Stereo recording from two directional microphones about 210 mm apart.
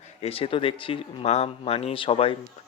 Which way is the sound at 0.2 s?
25° left (ahead or behind).